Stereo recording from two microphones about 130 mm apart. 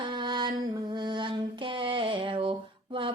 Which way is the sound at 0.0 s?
35° right (ahead or behind).